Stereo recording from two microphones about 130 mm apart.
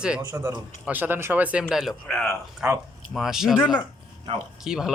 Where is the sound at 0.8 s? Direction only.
15° right (ahead or behind); by 2.3 s centre (ahead or behind).